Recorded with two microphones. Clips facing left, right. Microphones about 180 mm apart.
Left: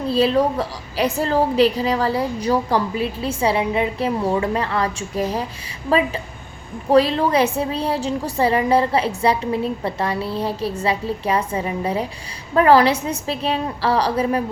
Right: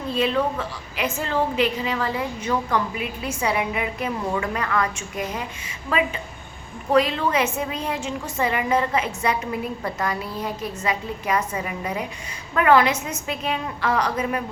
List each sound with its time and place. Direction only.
0.0 s a woman's voice: 35° left (ahead or behind)
6.9 s a woman's voice: 35° left (ahead or behind)